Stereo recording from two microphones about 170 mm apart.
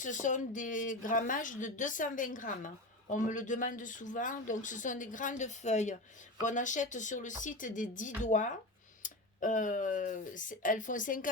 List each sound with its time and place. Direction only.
0.0 s speech: 50° left (ahead or behind)